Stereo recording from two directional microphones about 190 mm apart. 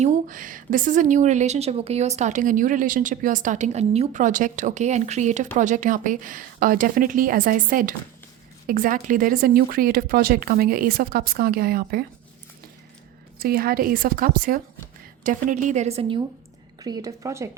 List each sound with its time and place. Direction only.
0.0 s a woman's voice: 40° right (ahead or behind)
13.4 s a woman's voice: 50° right (ahead or behind); by 16.2 s 30° right (ahead or behind)
16.8 s speech: 20° right (ahead or behind)